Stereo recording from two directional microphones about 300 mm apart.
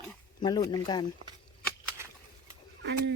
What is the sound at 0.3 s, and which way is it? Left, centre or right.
Speech, centre.